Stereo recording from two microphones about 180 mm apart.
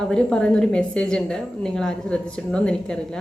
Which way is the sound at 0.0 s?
5° left (ahead or behind).